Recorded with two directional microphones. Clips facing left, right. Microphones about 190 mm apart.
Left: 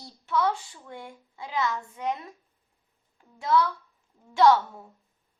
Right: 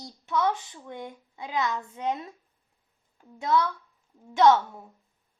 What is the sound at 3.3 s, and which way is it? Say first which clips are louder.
A woman's voice: left 1 dB; 20° right (ahead or behind).